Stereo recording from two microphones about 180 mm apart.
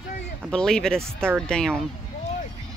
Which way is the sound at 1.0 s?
15° right (ahead or behind).